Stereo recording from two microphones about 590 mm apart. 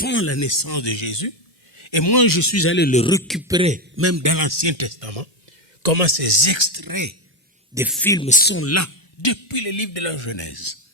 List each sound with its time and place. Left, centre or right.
0.0 s a man's voice: centre; by 5.3 s right
5.8 s speech: right
7.7 s speech: centre; by 9.0 s left
9.2 s a man's voice: left